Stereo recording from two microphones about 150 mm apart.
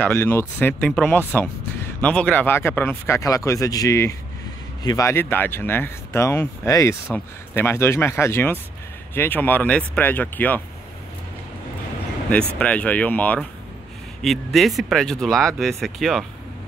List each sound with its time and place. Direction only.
0.0 s speech: 15° left (ahead or behind)
12.3 s speech: 10° left (ahead or behind)